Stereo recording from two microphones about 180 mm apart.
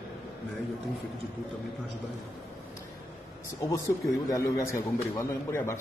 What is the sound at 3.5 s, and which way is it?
A man's voice, 15° left (ahead or behind).